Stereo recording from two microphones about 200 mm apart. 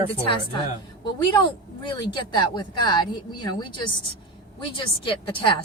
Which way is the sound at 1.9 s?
25° left (ahead or behind).